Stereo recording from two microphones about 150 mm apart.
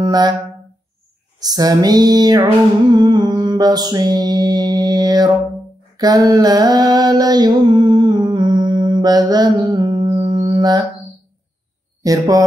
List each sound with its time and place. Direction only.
0.0 s a sound: 30° right (ahead or behind)
1.4 s music: 25° right (ahead or behind)
5.9 s mantra: 25° right (ahead or behind)
12.0 s speech: 25° right (ahead or behind)